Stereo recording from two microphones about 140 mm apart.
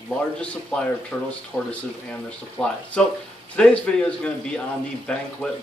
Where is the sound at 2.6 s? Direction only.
5° left (ahead or behind).